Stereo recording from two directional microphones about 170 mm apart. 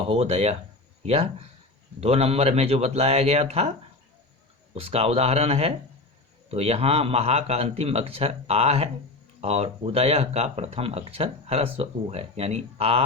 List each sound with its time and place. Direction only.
0.1 s speech: 40° right (ahead or behind)
4.7 s speech: 35° right (ahead or behind)